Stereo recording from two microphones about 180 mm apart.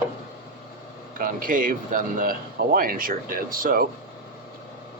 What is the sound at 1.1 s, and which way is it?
Speech, 50° right (ahead or behind).